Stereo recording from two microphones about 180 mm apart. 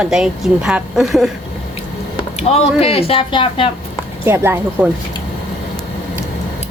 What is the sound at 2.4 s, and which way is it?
Speech, 35° left (ahead or behind).